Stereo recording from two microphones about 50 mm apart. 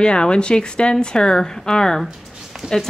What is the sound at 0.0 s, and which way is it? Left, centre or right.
Speech, centre.